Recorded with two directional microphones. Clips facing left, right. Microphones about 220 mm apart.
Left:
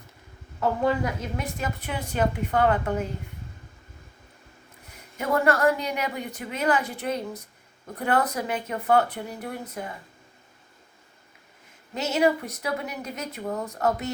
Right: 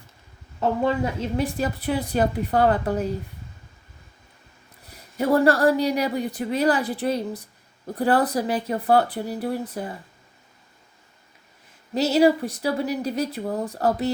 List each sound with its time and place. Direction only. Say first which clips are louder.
0.6 s speech: right 2 dB; 25° right (ahead or behind)
4.9 s speech: right 6 dB; 35° right (ahead or behind)
11.9 s speech: right 5 dB; 35° right (ahead or behind)